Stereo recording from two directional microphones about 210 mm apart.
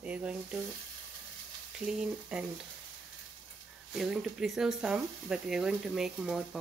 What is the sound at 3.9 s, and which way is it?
Speech, centre (ahead or behind).